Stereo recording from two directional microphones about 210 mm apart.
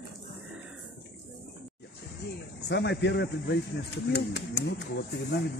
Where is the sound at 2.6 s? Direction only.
55° left (ahead or behind).